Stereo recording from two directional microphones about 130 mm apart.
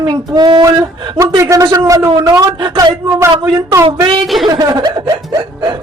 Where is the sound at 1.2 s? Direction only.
25° right (ahead or behind).